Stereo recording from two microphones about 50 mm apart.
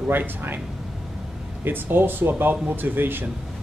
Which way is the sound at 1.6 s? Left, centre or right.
Right.